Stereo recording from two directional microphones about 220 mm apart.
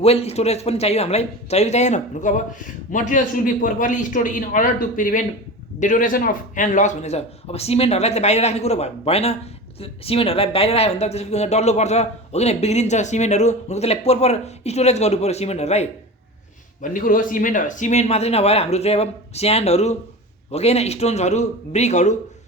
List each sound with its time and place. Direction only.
0.0 s a man's voice: 25° left (ahead or behind)